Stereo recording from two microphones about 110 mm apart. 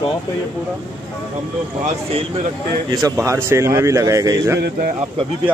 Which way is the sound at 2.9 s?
35° right (ahead or behind).